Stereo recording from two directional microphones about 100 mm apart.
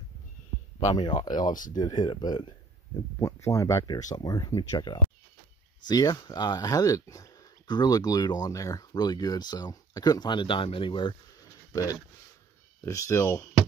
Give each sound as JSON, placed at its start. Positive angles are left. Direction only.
{"t": 0.9, "sound": "speech", "side_deg": 45}
{"t": 3.2, "sound": "speech", "side_deg": 30}
{"t": 11.7, "sound": "speech", "side_deg": 35}